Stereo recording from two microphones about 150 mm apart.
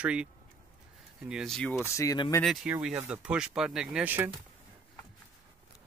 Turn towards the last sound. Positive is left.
turn(degrees=-10)  # may be behind; listen again after turning